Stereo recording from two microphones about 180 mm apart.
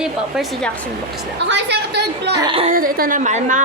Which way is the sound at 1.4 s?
75° right (ahead or behind).